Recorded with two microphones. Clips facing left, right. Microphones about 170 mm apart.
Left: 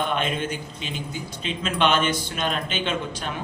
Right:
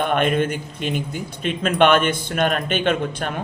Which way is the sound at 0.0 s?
55° right (ahead or behind).